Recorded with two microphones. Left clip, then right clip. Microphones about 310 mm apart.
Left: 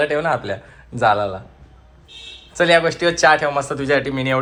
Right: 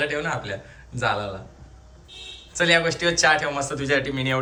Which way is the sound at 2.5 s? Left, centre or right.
Centre.